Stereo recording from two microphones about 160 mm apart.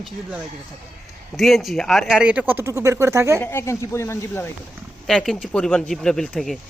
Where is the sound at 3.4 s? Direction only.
15° left (ahead or behind).